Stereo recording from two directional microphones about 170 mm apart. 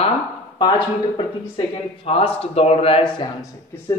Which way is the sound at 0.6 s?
25° left (ahead or behind).